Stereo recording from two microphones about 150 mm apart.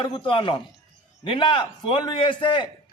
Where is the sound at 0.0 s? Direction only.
35° left (ahead or behind).